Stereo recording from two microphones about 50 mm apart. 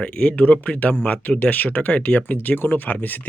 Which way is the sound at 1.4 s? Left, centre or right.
Left.